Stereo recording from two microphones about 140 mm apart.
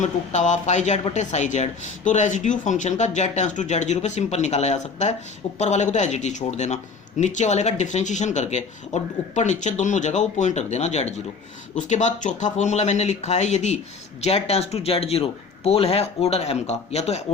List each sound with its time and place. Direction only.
0.0 s a man's voice: 60° left (ahead or behind)